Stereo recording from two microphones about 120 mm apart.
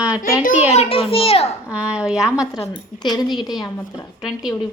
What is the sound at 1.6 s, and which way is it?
A woman's voice, 10° right (ahead or behind).